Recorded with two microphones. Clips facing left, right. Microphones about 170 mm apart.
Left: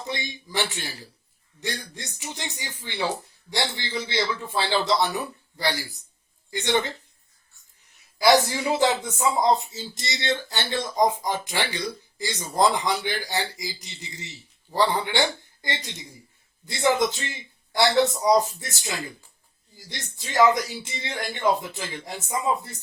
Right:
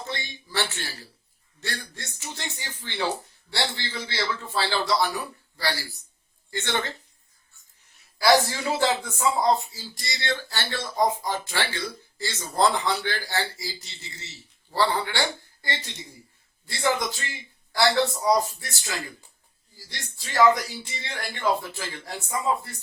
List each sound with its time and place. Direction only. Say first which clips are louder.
0.0 s speech: left 3 dB; 15° left (ahead or behind)
8.2 s speech: left 1 dB; 15° left (ahead or behind)